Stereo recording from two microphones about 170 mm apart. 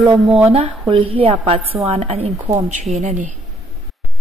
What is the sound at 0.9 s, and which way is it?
A woman's voice, 35° right (ahead or behind).